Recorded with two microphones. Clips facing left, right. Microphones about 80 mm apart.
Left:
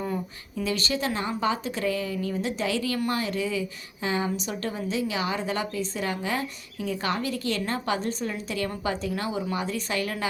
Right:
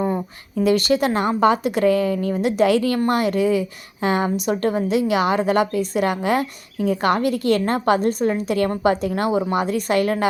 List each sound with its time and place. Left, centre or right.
0.0 s speech: right